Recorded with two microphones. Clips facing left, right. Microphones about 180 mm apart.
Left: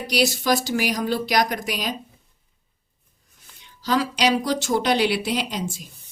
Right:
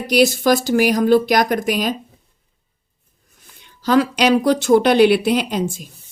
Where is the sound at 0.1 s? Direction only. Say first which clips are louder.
Right 7 dB; 50° right (ahead or behind).